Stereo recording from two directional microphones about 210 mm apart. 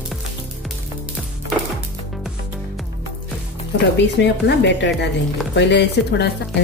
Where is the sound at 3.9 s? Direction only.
55° left (ahead or behind).